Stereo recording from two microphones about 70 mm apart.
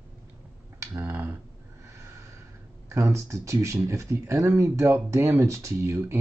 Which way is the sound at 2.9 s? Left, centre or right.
Right.